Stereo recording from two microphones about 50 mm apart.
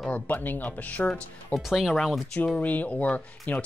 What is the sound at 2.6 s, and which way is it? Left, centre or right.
Speech, left.